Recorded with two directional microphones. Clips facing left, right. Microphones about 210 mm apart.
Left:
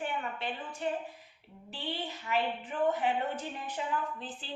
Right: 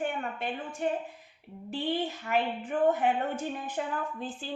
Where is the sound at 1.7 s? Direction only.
50° right (ahead or behind).